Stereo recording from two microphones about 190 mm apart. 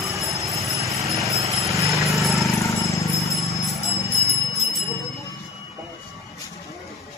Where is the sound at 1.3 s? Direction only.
15° right (ahead or behind).